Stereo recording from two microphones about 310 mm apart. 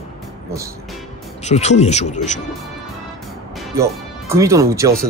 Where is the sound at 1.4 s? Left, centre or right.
Left.